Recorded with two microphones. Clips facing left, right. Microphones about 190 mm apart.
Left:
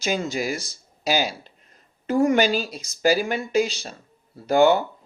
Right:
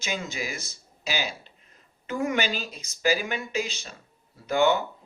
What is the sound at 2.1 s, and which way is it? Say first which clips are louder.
Speech: left 8 dB; 35° left (ahead or behind).